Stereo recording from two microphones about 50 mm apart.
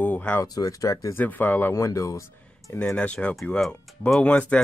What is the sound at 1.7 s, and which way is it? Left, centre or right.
Speech, left.